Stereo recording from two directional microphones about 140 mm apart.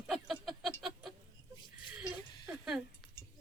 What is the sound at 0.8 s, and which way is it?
Chicken, centre (ahead or behind).